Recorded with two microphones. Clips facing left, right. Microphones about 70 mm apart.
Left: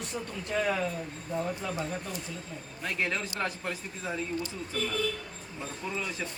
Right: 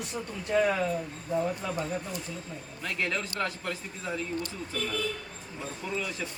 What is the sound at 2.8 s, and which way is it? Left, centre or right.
Speech, left.